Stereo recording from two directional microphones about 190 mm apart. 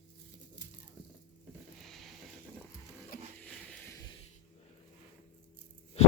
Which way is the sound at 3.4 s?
5° left (ahead or behind).